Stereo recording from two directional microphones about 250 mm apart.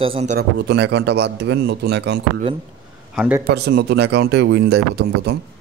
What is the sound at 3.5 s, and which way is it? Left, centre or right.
Speech, right.